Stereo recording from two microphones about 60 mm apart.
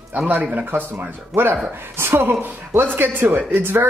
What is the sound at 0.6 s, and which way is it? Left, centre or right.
Speech, right.